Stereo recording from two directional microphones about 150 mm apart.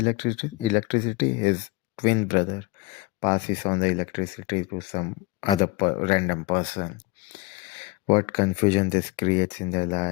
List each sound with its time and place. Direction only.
0.0 s speech: 45° left (ahead or behind)
8.0 s speech: 35° left (ahead or behind)